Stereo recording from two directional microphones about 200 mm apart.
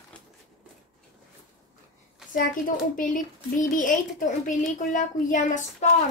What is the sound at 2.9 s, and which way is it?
A child's voice, 40° left (ahead or behind).